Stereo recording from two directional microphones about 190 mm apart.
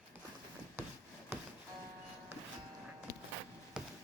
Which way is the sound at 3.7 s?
5° right (ahead or behind).